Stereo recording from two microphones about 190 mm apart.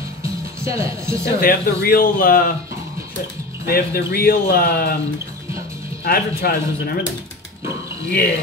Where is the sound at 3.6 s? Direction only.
55° left (ahead or behind).